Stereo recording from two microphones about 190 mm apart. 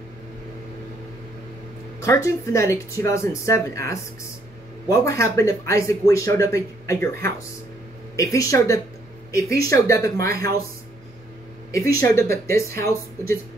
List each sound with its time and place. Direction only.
2.0 s speech: 15° left (ahead or behind)
11.7 s speech: 15° left (ahead or behind)